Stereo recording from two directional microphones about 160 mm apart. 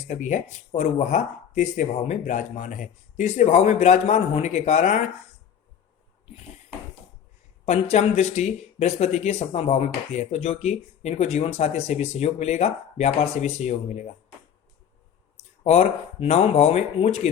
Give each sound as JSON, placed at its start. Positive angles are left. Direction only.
{"t": 0.1, "sound": "speech", "side_deg": 50}
{"t": 7.6, "sound": "speech", "side_deg": 45}
{"t": 15.6, "sound": "speech", "side_deg": 45}